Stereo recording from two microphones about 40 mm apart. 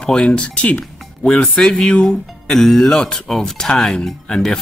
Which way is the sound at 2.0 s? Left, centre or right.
Centre.